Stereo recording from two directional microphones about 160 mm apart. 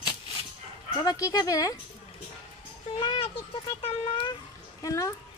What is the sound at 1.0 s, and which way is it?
Speech, 20° left (ahead or behind).